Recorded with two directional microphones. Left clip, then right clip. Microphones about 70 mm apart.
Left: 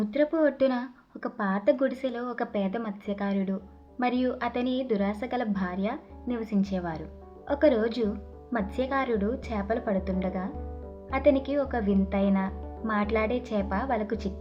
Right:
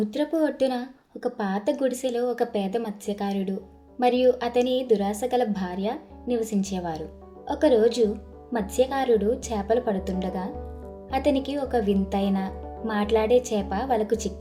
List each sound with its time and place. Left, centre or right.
0.0 s a woman's voice: right